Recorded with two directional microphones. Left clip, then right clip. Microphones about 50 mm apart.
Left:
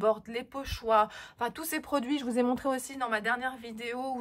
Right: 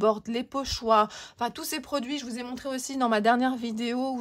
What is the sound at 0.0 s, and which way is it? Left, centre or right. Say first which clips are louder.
Speech: right 3 dB; right.